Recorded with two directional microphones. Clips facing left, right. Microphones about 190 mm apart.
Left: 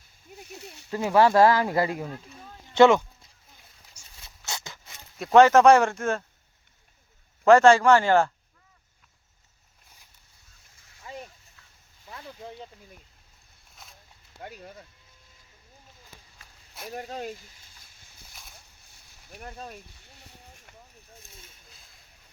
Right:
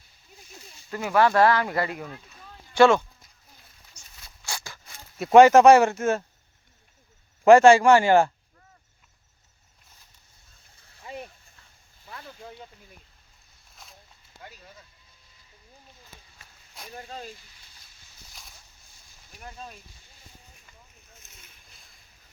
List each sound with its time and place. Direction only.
0.3 s a sound: 70° left (ahead or behind)
0.9 s speech: 25° left (ahead or behind)
2.3 s a sound: 25° left (ahead or behind)
4.0 s zipper: 10° left (ahead or behind)
4.4 s a sound: 20° left (ahead or behind)
5.2 s speech: 10° right (ahead or behind)
7.4 s speech: 10° right (ahead or behind)
12.1 s speech: 25° left (ahead or behind)
13.8 s snake: centre (ahead or behind)
14.4 s speech: 55° left (ahead or behind)
17.0 s speech: 55° left (ahead or behind)
19.3 s speech: 50° left (ahead or behind)
20.1 s boat: 70° left (ahead or behind)